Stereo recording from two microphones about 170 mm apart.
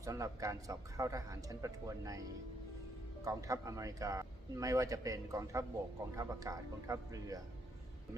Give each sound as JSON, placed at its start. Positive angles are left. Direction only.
{"t": 0.0, "sound": "a man's voice", "side_deg": -20}
{"t": 3.2, "sound": "a man's voice", "side_deg": -20}